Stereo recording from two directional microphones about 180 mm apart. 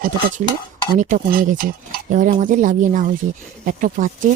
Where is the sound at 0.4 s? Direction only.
45° right (ahead or behind).